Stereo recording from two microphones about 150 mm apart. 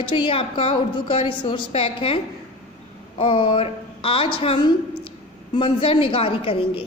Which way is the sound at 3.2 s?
35° left (ahead or behind).